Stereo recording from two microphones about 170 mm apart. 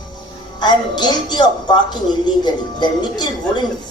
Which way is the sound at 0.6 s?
25° left (ahead or behind).